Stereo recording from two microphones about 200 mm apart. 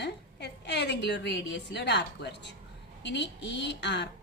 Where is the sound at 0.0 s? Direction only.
60° left (ahead or behind).